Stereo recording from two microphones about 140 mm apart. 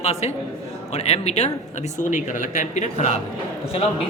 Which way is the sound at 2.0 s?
65° left (ahead or behind).